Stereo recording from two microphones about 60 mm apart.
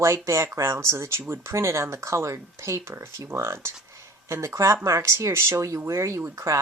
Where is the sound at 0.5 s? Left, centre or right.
Right.